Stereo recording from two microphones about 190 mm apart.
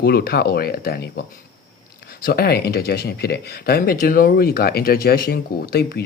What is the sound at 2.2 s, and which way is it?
Speech, 55° left (ahead or behind).